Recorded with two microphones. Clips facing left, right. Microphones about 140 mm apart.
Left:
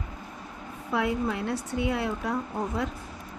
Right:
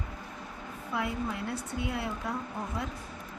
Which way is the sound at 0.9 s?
80° left.